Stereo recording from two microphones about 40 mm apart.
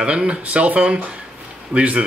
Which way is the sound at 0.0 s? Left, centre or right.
Right.